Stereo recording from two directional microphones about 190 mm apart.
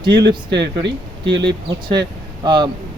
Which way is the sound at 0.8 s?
65° right (ahead or behind).